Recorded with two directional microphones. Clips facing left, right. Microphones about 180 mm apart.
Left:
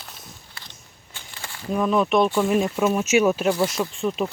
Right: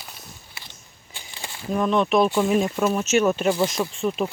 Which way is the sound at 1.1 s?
15° right (ahead or behind).